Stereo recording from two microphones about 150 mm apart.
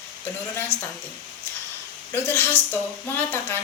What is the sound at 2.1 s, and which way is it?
A woman's voice, 15° left (ahead or behind).